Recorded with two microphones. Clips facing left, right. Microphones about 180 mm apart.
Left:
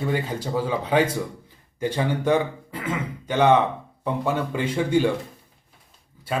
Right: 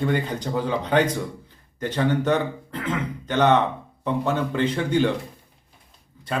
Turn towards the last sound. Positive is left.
turn(degrees=5)  # may be behind; listen again after turning